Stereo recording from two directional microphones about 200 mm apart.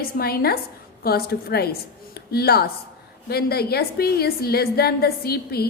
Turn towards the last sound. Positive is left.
turn(degrees=50)  # may be behind; listen again after turning